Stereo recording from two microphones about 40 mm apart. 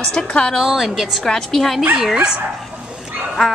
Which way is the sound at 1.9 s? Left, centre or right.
Centre.